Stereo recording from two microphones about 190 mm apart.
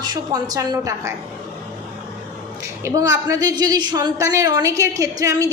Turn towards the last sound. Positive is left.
turn(degrees=-15)  # may be behind; listen again after turning